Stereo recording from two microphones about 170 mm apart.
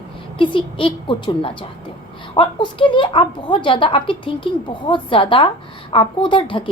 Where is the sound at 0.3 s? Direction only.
30° left (ahead or behind).